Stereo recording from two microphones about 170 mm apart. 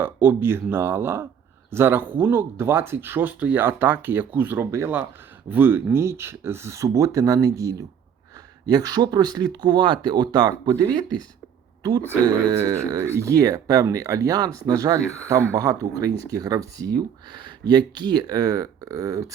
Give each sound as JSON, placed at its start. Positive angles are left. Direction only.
{"t": 0.0, "sound": "speech", "side_deg": -10}